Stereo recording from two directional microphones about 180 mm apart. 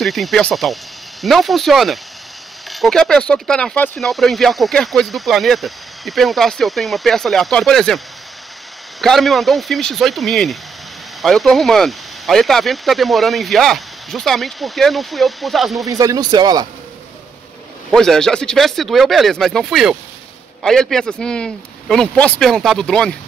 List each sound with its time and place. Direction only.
0.0 s speech: centre (ahead or behind)
9.0 s speech: centre (ahead or behind)
15.8 s speech: 20° right (ahead or behind)
17.9 s speech: 5° left (ahead or behind)